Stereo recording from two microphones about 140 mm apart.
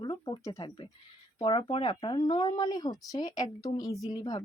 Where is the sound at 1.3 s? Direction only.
35° left (ahead or behind).